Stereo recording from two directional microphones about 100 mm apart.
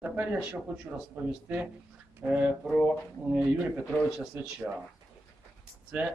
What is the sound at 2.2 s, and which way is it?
Speech, 15° right (ahead or behind).